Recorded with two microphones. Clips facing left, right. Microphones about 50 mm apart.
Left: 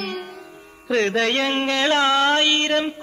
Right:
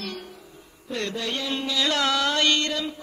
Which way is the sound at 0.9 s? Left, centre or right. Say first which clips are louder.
Left 10 dB; left.